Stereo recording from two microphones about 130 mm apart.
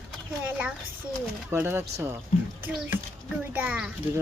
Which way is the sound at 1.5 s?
20° right (ahead or behind).